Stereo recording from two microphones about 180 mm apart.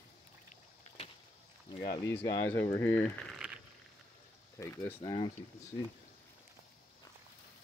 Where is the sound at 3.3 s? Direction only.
Centre (ahead or behind).